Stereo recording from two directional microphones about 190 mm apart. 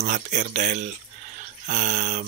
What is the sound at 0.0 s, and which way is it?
Speech, 40° right (ahead or behind).